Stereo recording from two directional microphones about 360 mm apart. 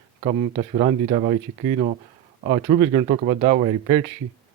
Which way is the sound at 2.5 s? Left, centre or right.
Centre.